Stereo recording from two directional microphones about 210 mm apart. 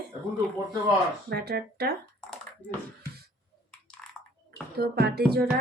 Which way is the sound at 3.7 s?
5° left (ahead or behind).